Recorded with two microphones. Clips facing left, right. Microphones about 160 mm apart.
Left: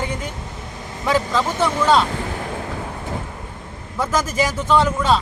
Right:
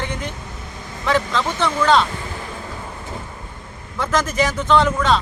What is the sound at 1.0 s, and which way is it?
Speech, 10° left (ahead or behind).